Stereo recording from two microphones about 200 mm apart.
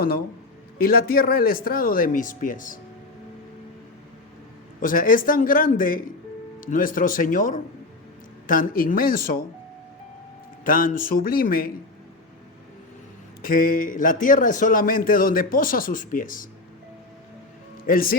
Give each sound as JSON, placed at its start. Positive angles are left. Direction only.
{"t": 0.8, "sound": "a man's voice", "side_deg": 50}
{"t": 4.8, "sound": "a man's voice", "side_deg": 45}
{"t": 10.6, "sound": "a man's voice", "side_deg": 45}
{"t": 13.4, "sound": "a man's voice", "side_deg": 45}